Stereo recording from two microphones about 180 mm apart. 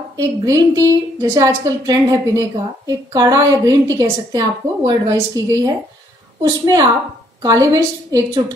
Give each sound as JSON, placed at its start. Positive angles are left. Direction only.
{"t": 0.2, "sound": "a woman's voice", "side_deg": -20}